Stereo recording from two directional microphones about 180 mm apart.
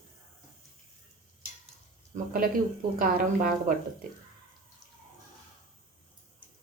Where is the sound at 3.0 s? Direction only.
50° right (ahead or behind).